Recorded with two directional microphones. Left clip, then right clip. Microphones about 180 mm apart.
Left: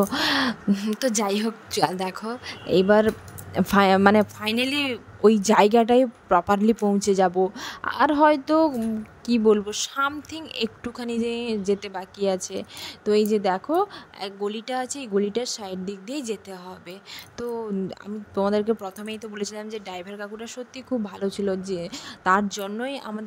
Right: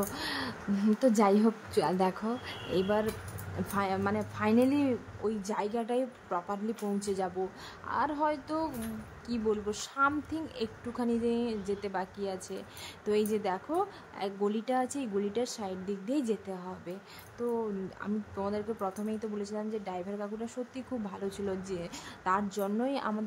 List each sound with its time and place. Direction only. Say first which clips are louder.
0.0 s speech: left 13 dB; 40° left (ahead or behind)
1.9 s speech: left 1 dB; centre (ahead or behind)
2.1 s a woman's voice: left 4 dB; 45° left (ahead or behind)